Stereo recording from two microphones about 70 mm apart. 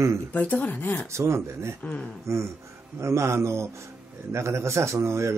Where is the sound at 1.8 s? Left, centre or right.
Left.